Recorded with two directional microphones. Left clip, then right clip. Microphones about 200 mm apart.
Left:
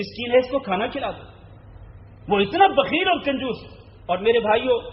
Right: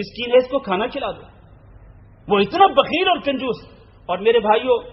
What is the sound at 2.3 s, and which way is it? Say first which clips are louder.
A man's voice: right 3 dB; 30° right (ahead or behind).